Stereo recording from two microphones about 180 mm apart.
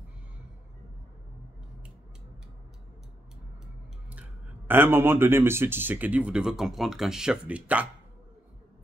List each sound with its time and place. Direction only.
4.1 s speech: 10° right (ahead or behind)